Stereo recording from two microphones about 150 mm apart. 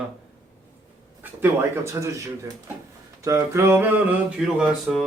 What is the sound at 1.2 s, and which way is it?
Speech, 15° right (ahead or behind).